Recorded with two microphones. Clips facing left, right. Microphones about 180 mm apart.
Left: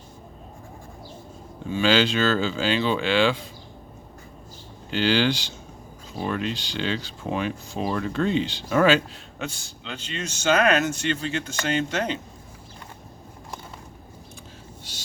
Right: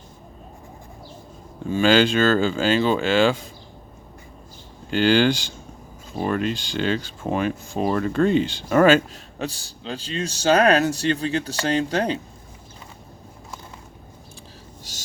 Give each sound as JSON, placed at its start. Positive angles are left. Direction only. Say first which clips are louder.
{"t": 1.7, "sound": "speech", "louder": "right 4 dB", "side_deg": -50}
{"t": 4.9, "sound": "speech", "louder": "right 4 dB", "side_deg": -50}
{"t": 14.9, "sound": "snort", "louder": "even", "side_deg": -40}